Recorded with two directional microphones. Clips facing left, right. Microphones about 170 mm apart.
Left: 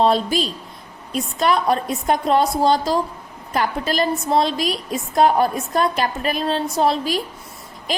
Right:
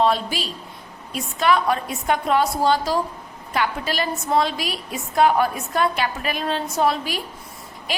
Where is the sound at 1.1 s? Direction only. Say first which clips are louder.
Left 1 dB; 35° left (ahead or behind).